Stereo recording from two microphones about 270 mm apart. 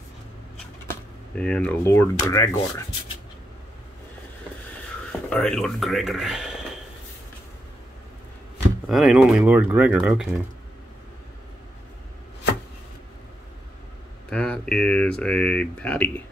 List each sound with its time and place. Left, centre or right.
0.8 s speech: centre
5.3 s speech: centre
8.8 s speech: centre
14.3 s speech: centre